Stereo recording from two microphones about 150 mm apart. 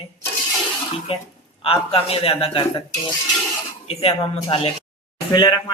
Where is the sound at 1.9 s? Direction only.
40° left (ahead or behind).